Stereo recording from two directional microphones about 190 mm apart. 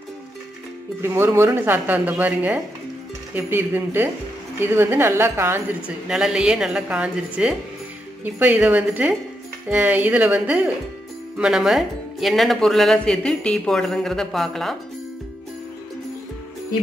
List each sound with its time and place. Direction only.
1.0 s a woman's voice: 10° right (ahead or behind)